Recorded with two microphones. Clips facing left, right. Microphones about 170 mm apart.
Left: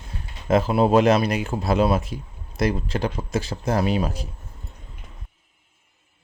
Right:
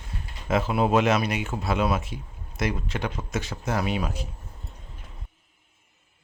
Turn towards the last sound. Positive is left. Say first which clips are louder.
# left 5 dB
turn(degrees=35)  # may be behind; listen again after turning